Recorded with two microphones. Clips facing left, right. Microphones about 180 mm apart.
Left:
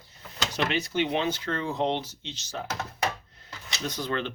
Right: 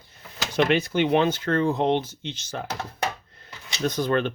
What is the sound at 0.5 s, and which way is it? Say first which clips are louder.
Speech: right 7 dB; 55° right (ahead or behind).